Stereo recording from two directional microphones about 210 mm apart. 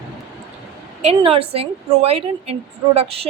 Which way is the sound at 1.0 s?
25° right (ahead or behind).